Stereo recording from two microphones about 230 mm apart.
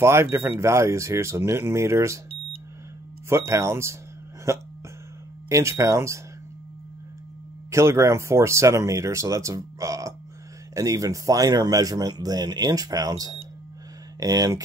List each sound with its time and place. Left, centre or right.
0.0 s speech: centre
3.3 s speech: centre
7.7 s speech: centre